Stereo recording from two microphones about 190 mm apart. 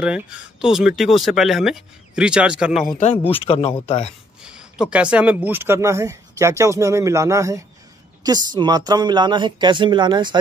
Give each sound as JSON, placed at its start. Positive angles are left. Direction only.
{"t": 0.0, "sound": "speech", "side_deg": -5}
{"t": 3.0, "sound": "speech", "side_deg": 35}
{"t": 4.4, "sound": "speech", "side_deg": -5}